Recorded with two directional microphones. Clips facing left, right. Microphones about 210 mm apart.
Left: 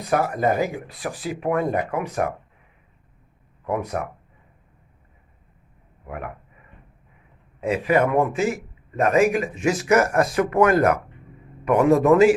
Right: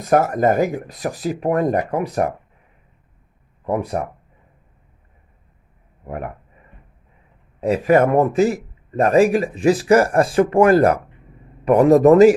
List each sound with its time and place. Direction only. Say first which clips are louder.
0.0 s a man's voice: right 5 dB; 45° right (ahead or behind)
3.7 s a man's voice: right 4 dB; 30° right (ahead or behind)
6.1 s a man's voice: right 5 dB; 35° right (ahead or behind)
7.6 s a man's voice: right 5 dB; 40° right (ahead or behind)